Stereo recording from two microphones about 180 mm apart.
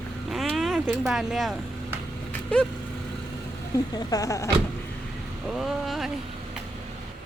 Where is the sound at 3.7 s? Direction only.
20° left (ahead or behind).